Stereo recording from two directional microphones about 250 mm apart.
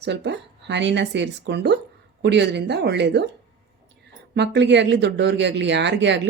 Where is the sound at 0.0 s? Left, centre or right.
Right.